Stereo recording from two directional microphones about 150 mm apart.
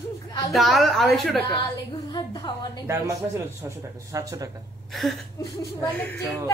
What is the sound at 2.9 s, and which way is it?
A man's voice, 20° right (ahead or behind).